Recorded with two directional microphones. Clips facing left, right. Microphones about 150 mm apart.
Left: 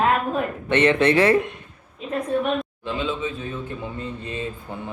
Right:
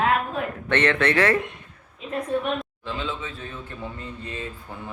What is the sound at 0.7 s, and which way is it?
Speech, 15° left (ahead or behind).